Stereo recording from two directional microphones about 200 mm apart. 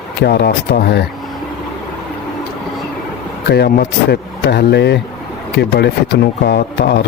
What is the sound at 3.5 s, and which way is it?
Speech, 55° left (ahead or behind).